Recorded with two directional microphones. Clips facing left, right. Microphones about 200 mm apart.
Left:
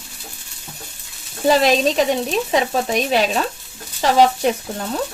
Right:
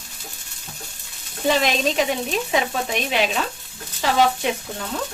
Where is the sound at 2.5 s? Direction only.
40° left (ahead or behind).